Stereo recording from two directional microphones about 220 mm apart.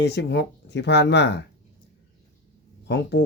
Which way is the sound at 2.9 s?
50° left (ahead or behind).